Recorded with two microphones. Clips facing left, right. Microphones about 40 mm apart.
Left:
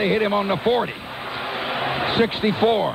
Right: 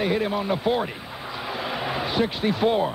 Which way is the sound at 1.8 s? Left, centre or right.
Left.